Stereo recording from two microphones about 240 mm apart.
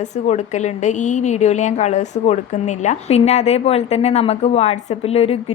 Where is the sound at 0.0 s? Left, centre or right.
Left.